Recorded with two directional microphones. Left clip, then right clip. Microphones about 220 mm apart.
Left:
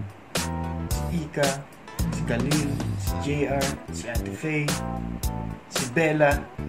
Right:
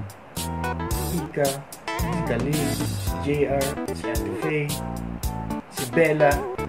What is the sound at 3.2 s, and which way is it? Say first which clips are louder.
Speech: right 4 dB; 5° left (ahead or behind).